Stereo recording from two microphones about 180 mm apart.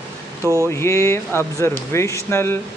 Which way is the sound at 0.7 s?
15° left (ahead or behind).